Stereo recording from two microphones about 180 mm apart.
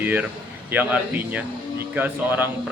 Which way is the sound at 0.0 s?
10° right (ahead or behind).